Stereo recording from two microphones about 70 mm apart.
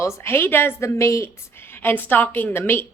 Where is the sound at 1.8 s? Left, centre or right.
Left.